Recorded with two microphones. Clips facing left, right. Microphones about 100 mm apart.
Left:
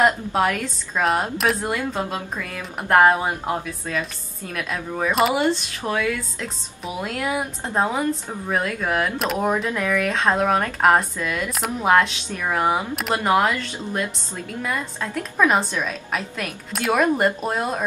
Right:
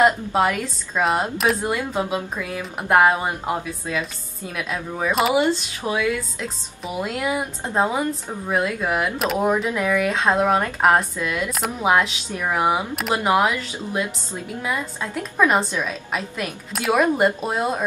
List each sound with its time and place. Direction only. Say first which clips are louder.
0.0 s a woman's voice: right 1 dB; centre (ahead or behind)